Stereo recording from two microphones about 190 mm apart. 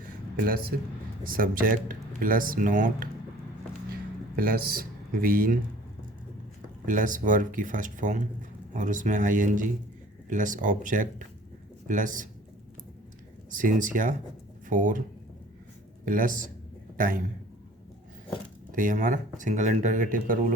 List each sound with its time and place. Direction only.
1.2 s speech: 50° right (ahead or behind)
4.4 s speech: 50° right (ahead or behind)
6.8 s speech: 45° right (ahead or behind)
13.5 s speech: 45° right (ahead or behind)
16.0 s speech: 45° right (ahead or behind)
18.7 s speech: 45° right (ahead or behind)